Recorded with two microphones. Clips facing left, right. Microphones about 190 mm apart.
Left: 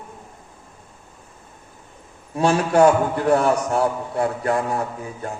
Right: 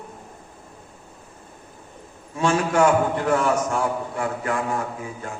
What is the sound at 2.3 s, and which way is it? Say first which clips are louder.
A man's voice: left 3 dB; 35° left (ahead or behind).